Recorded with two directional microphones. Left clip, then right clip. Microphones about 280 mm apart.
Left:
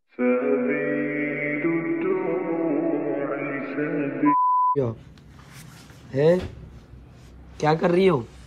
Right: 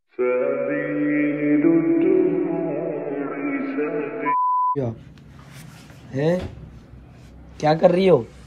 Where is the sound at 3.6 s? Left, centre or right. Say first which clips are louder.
Right 2 dB; centre.